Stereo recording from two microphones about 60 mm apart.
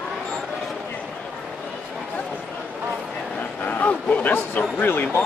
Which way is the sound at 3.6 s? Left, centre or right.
Left.